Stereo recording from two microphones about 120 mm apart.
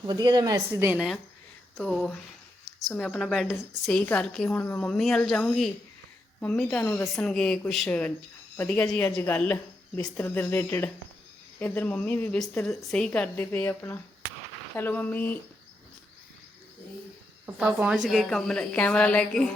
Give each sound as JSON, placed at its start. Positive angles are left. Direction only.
{"t": 0.0, "sound": "a woman's voice", "side_deg": -35}
{"t": 0.9, "sound": "a woman's voice", "side_deg": 0}
{"t": 12.6, "sound": "a woman's voice", "side_deg": 5}
{"t": 17.4, "sound": "a woman's voice", "side_deg": -10}